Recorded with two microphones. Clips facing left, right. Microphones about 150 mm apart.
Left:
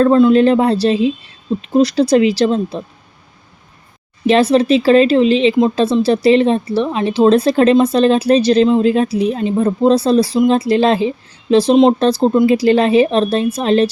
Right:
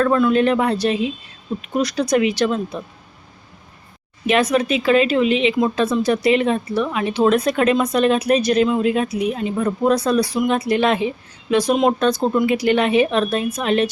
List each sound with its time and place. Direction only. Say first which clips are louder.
0.0 s speech: left 6 dB; 25° left (ahead or behind)
4.3 s speech: left 6 dB; 30° left (ahead or behind)